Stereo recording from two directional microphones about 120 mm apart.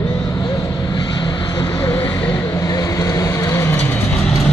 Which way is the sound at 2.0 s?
15° left (ahead or behind).